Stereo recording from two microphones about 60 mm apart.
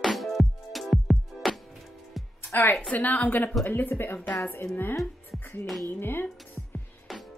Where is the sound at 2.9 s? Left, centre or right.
Left.